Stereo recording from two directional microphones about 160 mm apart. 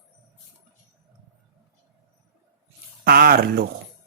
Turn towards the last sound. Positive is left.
turn(degrees=-75)  # may be behind; listen again after turning